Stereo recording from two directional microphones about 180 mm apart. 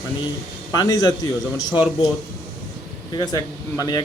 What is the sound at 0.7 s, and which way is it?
Speech, 20° left (ahead or behind).